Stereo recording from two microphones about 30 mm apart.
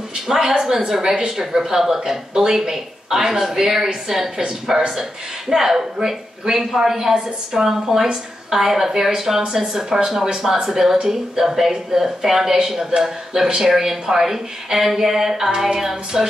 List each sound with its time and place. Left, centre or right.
0.1 s speech: centre
7.2 s speech: right
7.6 s speech: centre